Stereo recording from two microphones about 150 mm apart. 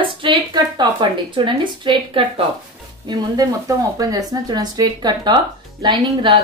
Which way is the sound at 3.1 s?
25° right (ahead or behind).